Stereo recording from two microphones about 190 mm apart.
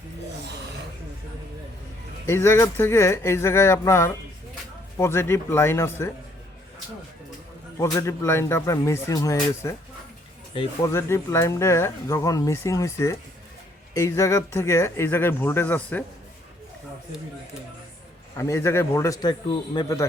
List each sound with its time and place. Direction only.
2.2 s speech: 15° left (ahead or behind)
7.8 s speech: 15° left (ahead or behind)
10.8 s speech: 15° left (ahead or behind)
18.3 s speech: 15° left (ahead or behind)